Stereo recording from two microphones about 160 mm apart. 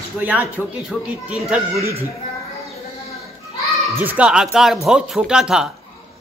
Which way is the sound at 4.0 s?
10° right (ahead or behind).